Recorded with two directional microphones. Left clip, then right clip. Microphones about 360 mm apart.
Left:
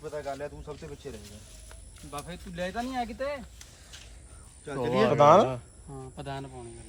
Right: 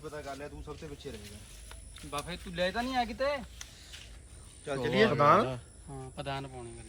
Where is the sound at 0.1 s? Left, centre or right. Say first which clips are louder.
Left 8 dB; centre.